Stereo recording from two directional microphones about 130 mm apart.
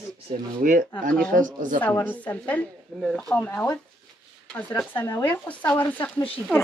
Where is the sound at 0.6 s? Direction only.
90° right.